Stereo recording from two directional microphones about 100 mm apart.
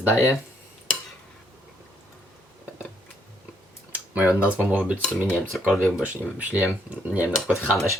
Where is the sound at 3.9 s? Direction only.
15° right (ahead or behind).